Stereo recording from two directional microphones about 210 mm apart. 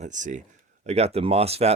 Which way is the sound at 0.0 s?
35° right (ahead or behind).